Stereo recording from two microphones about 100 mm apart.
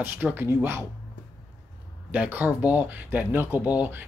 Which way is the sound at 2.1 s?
15° right (ahead or behind).